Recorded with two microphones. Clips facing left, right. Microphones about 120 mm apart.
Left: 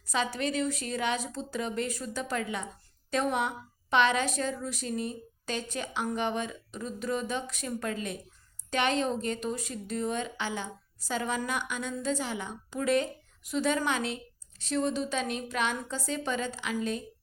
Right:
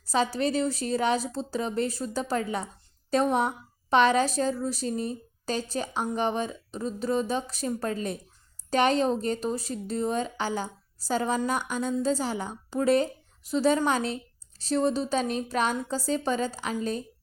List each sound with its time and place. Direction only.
0.0 s a woman's voice: 35° right (ahead or behind)